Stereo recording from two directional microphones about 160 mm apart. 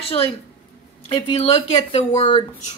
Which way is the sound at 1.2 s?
40° left (ahead or behind).